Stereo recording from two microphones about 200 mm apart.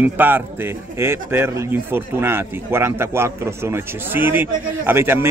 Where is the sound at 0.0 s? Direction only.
10° right (ahead or behind).